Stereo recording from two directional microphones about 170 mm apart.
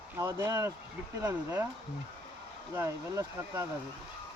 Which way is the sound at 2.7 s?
15° right (ahead or behind).